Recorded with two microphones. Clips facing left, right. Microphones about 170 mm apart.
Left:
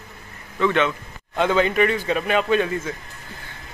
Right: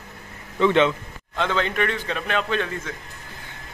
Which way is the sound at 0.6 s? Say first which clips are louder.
Right 2 dB; 25° right (ahead or behind).